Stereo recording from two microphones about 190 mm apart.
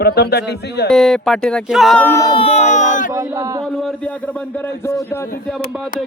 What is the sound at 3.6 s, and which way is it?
Speech, 5° left (ahead or behind).